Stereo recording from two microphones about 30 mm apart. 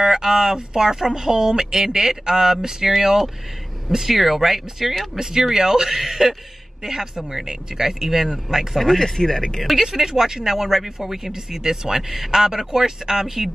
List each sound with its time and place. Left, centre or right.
0.1 s a woman's voice: centre
5.3 s speech: centre
8.7 s speech: centre; by 9.6 s left
9.8 s a woman's voice: centre